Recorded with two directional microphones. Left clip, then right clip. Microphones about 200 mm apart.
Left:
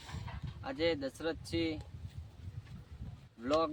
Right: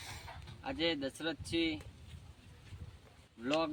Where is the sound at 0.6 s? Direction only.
15° left (ahead or behind).